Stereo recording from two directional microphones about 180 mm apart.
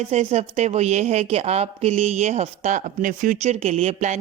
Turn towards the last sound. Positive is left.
turn(degrees=-35)  # may be behind; listen again after turning